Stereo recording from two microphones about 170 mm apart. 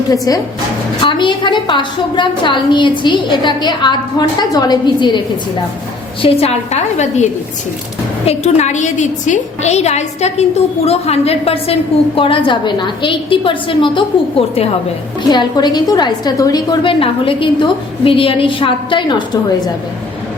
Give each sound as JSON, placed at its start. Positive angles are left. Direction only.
{"t": 0.1, "sound": "a woman's voice", "side_deg": 20}
{"t": 6.2, "sound": "a woman's voice", "side_deg": 40}
{"t": 8.3, "sound": "a woman's voice", "side_deg": 45}
{"t": 15.3, "sound": "a woman's voice", "side_deg": 25}